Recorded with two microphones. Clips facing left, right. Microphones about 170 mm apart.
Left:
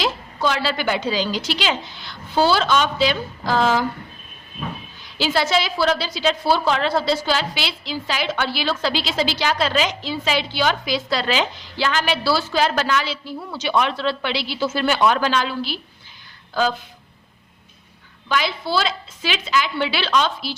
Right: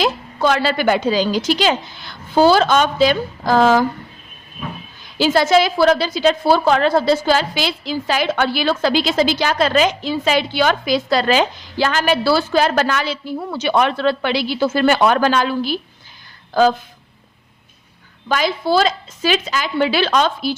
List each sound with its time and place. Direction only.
0.0 s a woman's voice: 50° right (ahead or behind)
5.1 s a woman's voice: 45° right (ahead or behind)
18.3 s a woman's voice: 45° right (ahead or behind)